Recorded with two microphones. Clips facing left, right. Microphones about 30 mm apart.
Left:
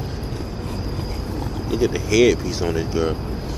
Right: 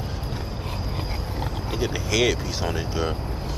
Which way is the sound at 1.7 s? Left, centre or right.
Centre.